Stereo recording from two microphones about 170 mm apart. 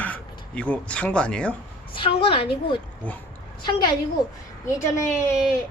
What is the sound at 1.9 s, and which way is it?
Speech, 30° left (ahead or behind).